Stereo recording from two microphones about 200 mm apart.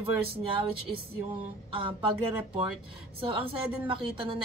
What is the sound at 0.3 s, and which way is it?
Speech, 25° right (ahead or behind).